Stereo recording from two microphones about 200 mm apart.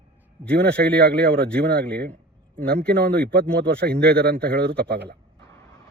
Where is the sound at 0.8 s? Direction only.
55° right (ahead or behind).